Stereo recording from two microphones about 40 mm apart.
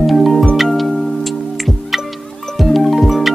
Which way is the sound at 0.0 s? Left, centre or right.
Centre.